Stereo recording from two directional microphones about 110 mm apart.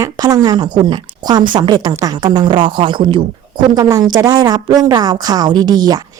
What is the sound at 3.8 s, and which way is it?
Speech, 30° right (ahead or behind).